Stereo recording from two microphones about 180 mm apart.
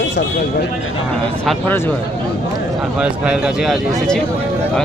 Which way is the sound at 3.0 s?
5° right (ahead or behind).